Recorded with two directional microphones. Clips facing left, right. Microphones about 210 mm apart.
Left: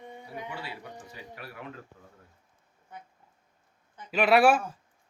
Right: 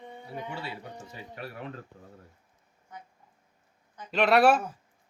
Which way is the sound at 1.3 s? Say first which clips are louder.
Right 5 dB; 30° right (ahead or behind).